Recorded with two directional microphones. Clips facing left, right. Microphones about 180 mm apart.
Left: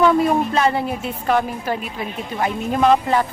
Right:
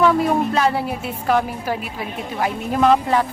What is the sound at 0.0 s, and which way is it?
A woman's voice, centre (ahead or behind).